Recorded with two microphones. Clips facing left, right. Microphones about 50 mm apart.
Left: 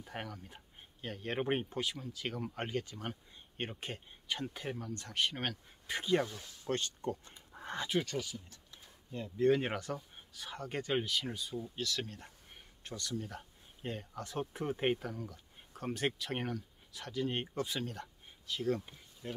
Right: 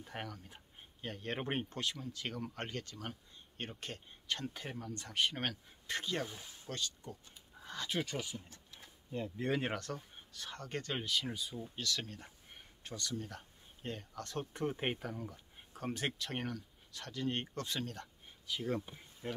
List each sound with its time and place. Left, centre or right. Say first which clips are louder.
0.0 s speech: left 1 dB; centre
6.2 s speech: left 2 dB; centre
6.7 s a sound: left 7 dB; left
8.2 s speech: left 2 dB; right
9.1 s speech: left 7 dB; centre
9.6 s speech: left 1 dB; centre
15.7 s speech: left 3 dB; centre
18.5 s speech: left 3 dB; centre
19.2 s speech: right 1 dB; right